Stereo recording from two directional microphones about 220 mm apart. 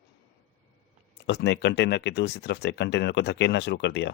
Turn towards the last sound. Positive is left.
turn(degrees=50)  # may be behind; listen again after turning